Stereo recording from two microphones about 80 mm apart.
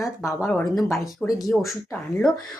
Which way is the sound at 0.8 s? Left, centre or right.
Left.